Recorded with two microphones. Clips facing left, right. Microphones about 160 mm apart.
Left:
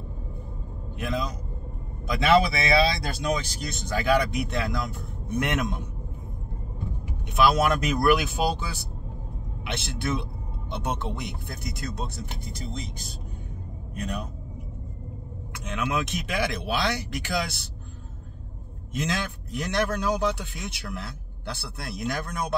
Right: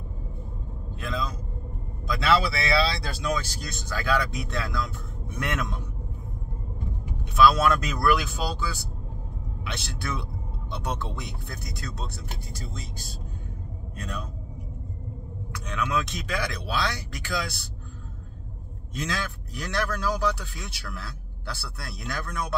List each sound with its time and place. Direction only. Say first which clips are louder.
2.0 s speech: left 3 dB; 20° left (ahead or behind)
7.3 s speech: right 1 dB; 20° left (ahead or behind)
15.5 s speech: even; 20° left (ahead or behind)
19.0 s speech: left 1 dB; 20° left (ahead or behind)